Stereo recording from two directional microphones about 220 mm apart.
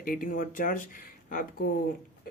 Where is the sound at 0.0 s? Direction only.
40° left (ahead or behind).